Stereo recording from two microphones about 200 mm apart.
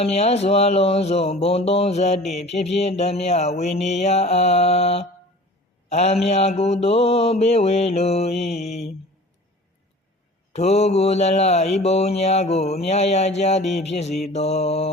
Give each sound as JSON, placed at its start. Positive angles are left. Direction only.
{"t": 0.0, "sound": "mantra", "side_deg": 30}
{"t": 2.2, "sound": "mantra", "side_deg": 0}
{"t": 2.5, "sound": "mantra", "side_deg": 35}
{"t": 8.4, "sound": "mantra", "side_deg": 0}
{"t": 10.5, "sound": "mantra", "side_deg": 35}